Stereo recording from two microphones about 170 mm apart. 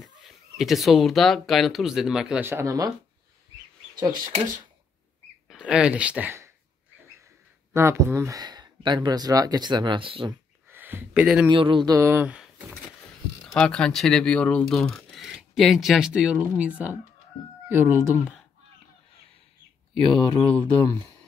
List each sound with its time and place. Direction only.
0.0 s speech: centre (ahead or behind); by 2.9 s 20° right (ahead or behind)
5.5 s speech: 5° right (ahead or behind)
7.7 s speech: 15° right (ahead or behind); by 10.3 s 30° right (ahead or behind)
10.7 s a sound: 10° right (ahead or behind)
11.4 s speech: 30° right (ahead or behind); by 12.5 s 5° right (ahead or behind)
13.6 s speech: 5° left (ahead or behind); by 18.1 s 15° right (ahead or behind)
20.1 s speech: 30° left (ahead or behind)